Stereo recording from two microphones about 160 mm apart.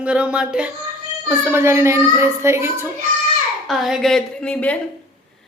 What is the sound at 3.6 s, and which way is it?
A woman's voice, centre (ahead or behind).